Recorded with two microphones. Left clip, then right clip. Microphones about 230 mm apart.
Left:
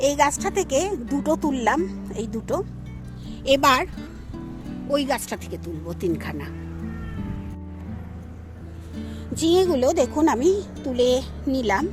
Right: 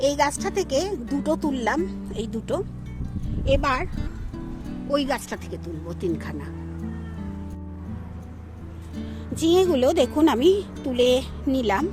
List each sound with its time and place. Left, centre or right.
0.0 s speech: centre
3.4 s a child's voice: left
3.9 s speech: centre
9.0 s speech: centre